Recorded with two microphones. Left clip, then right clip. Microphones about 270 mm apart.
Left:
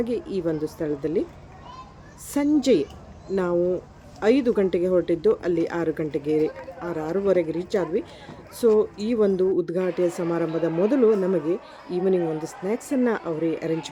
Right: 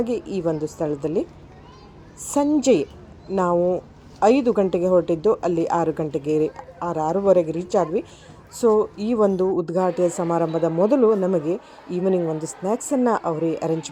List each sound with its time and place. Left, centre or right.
0.0 s speech: centre
2.3 s speech: centre